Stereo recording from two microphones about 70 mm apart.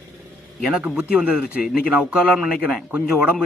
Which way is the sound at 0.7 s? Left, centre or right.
Centre.